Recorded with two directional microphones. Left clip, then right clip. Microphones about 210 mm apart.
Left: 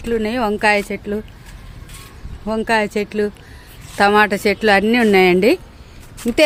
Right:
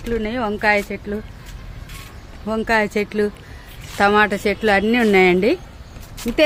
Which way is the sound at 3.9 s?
25° left (ahead or behind).